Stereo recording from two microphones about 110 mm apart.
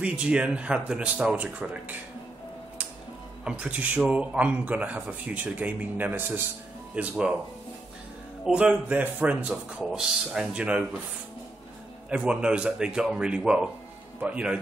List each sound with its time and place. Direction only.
0.0 s a man's voice: 10° right (ahead or behind)
3.4 s a man's voice: 15° right (ahead or behind)
8.5 s a man's voice: 10° right (ahead or behind)
12.1 s a man's voice: 10° right (ahead or behind)